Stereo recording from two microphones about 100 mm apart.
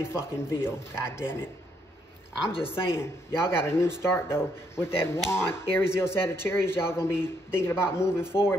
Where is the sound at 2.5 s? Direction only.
65° left (ahead or behind).